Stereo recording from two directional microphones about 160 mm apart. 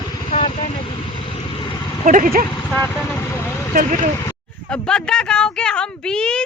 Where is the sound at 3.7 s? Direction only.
55° right (ahead or behind).